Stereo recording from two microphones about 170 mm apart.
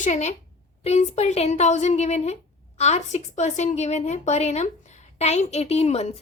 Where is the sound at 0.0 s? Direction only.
40° left (ahead or behind).